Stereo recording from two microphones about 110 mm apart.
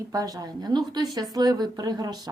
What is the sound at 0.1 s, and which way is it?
A woman's voice, 35° right (ahead or behind).